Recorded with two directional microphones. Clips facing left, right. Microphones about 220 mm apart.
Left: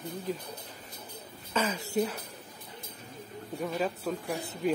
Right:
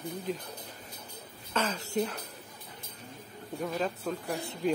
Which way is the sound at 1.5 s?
10° left (ahead or behind).